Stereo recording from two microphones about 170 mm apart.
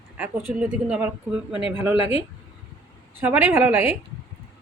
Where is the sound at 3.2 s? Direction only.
10° right (ahead or behind).